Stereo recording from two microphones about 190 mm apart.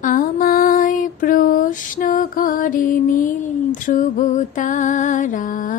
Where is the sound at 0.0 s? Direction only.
50° left (ahead or behind).